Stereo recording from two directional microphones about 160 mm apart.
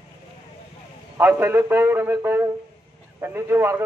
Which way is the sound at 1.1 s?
15° right (ahead or behind).